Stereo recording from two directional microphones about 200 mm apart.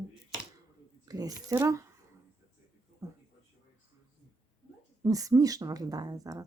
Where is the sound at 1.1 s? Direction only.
20° right (ahead or behind).